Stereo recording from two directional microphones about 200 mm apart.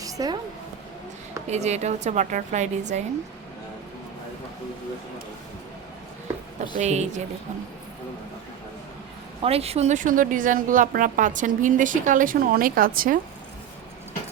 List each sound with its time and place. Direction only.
0.0 s a sound: 15° right (ahead or behind)
1.5 s a woman's voice: 35° right (ahead or behind)
6.7 s a woman's voice: 35° right (ahead or behind)
9.4 s a woman's voice: 30° right (ahead or behind)